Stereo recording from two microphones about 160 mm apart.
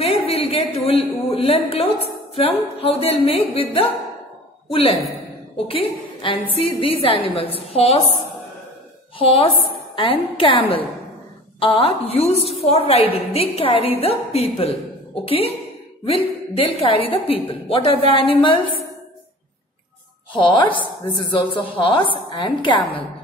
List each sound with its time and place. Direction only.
0.0 s a sound: 40° left (ahead or behind)
2.8 s a woman's voice: 40° left (ahead or behind)
9.2 s a woman's voice: 35° left (ahead or behind)
20.3 s a woman's voice: 30° left (ahead or behind)